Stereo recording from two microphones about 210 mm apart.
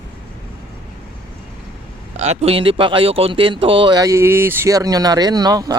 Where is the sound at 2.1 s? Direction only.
30° right (ahead or behind).